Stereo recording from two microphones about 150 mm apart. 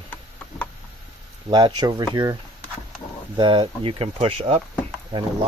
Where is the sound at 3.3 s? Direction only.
35° right (ahead or behind).